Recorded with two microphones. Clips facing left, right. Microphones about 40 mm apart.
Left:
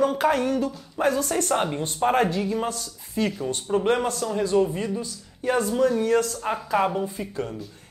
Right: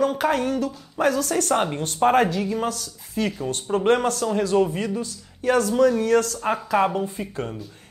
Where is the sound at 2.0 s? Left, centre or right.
Centre.